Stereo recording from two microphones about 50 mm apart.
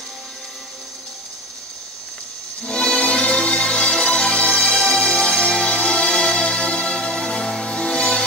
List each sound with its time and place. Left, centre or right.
2.6 s music: centre